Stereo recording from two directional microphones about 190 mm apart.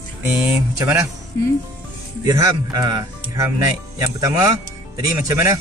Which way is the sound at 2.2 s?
20° right (ahead or behind).